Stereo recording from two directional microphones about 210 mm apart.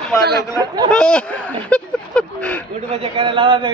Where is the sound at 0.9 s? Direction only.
5° left (ahead or behind).